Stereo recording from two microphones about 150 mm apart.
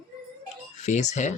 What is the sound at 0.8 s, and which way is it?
Speech, 50° left (ahead or behind).